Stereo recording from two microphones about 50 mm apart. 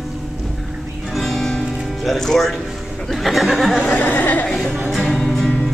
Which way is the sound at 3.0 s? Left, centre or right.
Centre.